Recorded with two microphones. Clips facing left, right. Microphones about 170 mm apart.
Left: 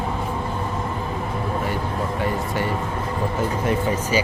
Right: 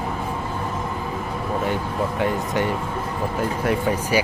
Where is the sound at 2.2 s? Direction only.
20° right (ahead or behind).